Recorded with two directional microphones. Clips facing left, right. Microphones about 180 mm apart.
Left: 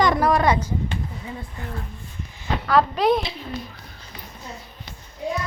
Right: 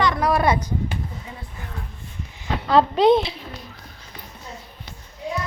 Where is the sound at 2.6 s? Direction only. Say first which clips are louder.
Right 3 dB; 25° right (ahead or behind).